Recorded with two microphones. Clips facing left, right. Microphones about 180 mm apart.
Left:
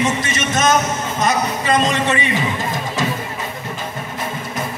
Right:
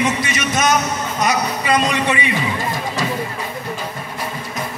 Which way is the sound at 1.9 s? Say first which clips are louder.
Even; 15° right (ahead or behind).